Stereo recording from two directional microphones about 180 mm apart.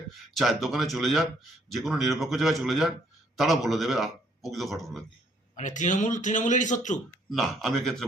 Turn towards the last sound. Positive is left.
turn(degrees=0)  # may be behind; listen again after turning